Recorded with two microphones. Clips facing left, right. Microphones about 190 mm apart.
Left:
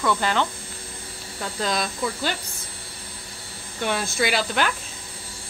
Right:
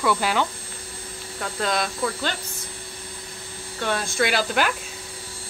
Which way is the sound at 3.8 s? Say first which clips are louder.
Even; 10° left (ahead or behind).